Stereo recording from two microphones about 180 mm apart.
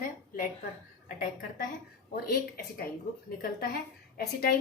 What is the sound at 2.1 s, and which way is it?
Speech, 55° left (ahead or behind).